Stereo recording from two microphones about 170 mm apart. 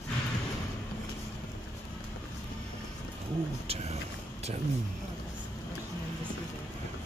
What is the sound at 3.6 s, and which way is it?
Speech, 40° right (ahead or behind).